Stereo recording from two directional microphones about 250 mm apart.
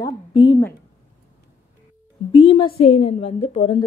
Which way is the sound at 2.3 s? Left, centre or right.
Left.